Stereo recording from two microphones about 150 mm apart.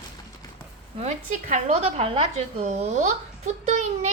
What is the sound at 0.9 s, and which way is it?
A woman's voice, 50° right (ahead or behind).